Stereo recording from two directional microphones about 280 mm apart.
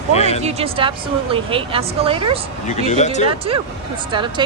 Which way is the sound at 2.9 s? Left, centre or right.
Left.